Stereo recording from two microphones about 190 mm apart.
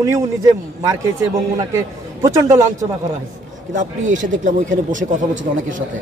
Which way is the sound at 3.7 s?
40° right (ahead or behind).